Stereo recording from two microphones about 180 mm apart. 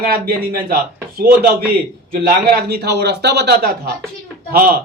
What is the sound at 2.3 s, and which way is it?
Speech, 60° right (ahead or behind).